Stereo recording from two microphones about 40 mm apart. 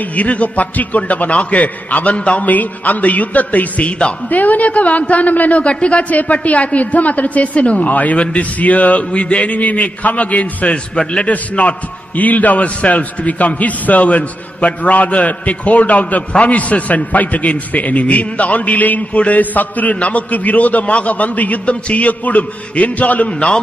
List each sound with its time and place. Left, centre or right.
0.1 s a man's voice: left
2.4 s a man's voice: left
5.6 s a man's voice: left